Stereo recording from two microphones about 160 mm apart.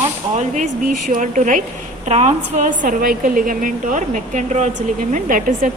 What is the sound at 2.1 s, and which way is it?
A woman's voice, 45° right (ahead or behind).